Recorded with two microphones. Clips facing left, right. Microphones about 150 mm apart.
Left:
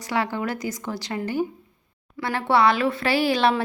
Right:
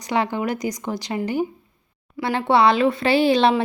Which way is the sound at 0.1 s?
20° right (ahead or behind).